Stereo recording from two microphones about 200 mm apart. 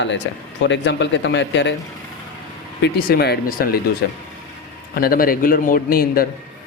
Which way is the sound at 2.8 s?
50° left (ahead or behind).